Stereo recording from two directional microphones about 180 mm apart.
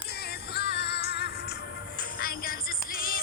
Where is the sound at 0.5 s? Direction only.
65° left (ahead or behind).